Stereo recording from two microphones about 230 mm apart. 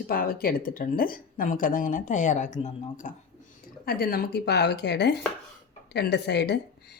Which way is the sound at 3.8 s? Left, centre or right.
Left.